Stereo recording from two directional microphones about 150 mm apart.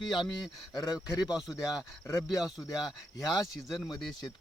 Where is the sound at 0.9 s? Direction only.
5° right (ahead or behind).